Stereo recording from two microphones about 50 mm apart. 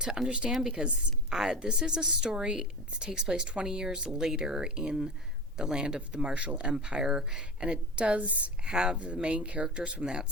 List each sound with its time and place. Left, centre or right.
0.0 s a woman's voice: centre
8.6 s a woman's voice: centre